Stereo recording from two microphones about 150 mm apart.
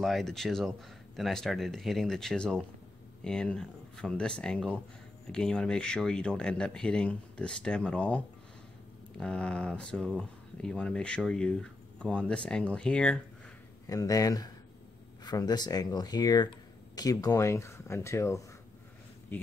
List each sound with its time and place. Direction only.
0.0 s speech: centre (ahead or behind)
9.2 s speech: 5° left (ahead or behind)
13.8 s speech: 25° left (ahead or behind)
19.3 s a sound: 10° left (ahead or behind)